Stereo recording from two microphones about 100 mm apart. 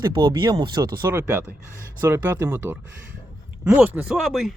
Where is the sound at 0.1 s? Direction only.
60° right (ahead or behind).